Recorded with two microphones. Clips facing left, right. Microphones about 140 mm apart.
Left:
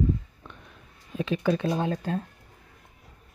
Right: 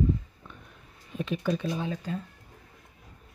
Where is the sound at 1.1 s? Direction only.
90° left; by 2.2 s 60° left (ahead or behind).